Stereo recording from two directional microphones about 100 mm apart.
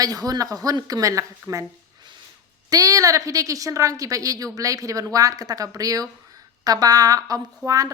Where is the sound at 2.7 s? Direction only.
35° right (ahead or behind).